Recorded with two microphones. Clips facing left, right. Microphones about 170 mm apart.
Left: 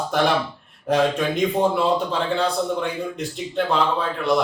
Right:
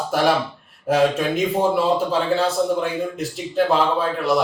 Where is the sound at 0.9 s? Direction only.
5° right (ahead or behind).